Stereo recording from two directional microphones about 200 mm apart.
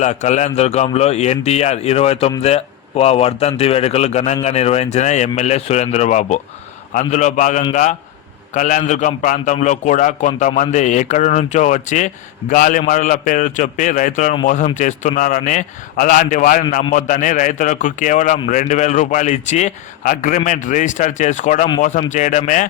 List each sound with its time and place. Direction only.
0.0 s a man's voice: 35° left (ahead or behind)